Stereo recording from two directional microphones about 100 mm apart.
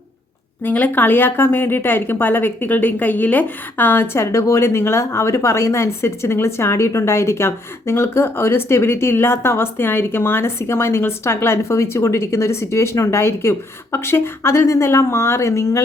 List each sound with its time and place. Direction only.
0.6 s a woman's voice: 20° left (ahead or behind)